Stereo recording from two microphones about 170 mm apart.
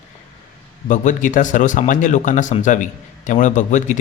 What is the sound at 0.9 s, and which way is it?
A man's voice, 50° left (ahead or behind).